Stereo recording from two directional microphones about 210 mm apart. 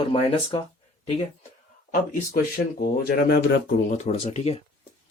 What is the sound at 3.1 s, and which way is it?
Speech, 45° left (ahead or behind).